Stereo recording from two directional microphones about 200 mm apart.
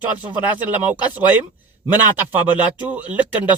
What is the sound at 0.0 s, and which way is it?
A man's voice, 10° right (ahead or behind).